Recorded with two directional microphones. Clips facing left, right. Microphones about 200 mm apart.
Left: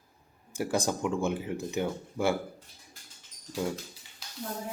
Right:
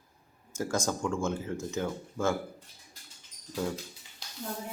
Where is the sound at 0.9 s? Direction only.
15° left (ahead or behind).